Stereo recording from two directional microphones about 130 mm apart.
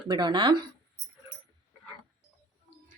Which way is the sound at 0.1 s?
35° right (ahead or behind).